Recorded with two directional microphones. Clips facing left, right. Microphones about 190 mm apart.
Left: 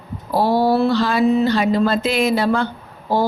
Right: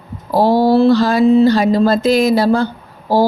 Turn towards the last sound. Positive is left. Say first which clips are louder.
# right 5 dB
turn(degrees=-35)  # may be behind; listen again after turning